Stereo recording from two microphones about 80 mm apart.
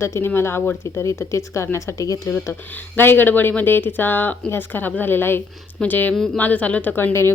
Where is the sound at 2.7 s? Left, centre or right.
Left.